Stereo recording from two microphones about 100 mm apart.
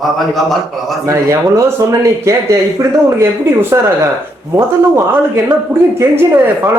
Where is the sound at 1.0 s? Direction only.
30° right (ahead or behind).